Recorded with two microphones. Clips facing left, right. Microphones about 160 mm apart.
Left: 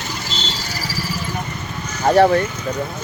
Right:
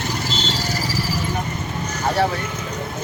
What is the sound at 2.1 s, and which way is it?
Speech, 55° left (ahead or behind).